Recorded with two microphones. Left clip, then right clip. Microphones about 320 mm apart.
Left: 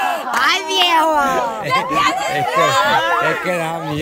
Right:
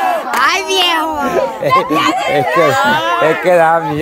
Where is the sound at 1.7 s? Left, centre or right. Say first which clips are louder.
Right 4 dB; centre.